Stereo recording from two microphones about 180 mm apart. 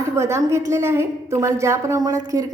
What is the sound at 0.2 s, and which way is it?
A woman's voice, 15° right (ahead or behind).